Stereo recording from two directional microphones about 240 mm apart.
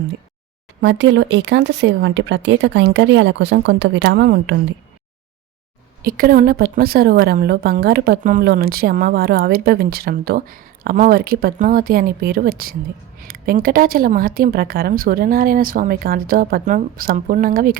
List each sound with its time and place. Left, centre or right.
0.8 s speech: right
6.0 s a woman's voice: right